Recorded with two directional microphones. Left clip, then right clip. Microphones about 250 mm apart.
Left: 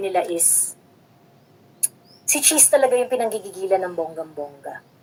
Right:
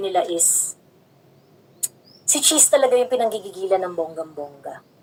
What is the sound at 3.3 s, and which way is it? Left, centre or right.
Speech, left.